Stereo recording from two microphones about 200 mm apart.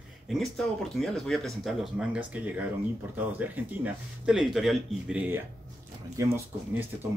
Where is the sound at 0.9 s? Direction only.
Centre (ahead or behind).